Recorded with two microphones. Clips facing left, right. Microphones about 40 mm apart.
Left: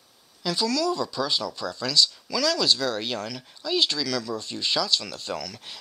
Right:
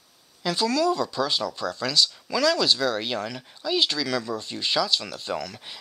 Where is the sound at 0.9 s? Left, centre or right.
Centre.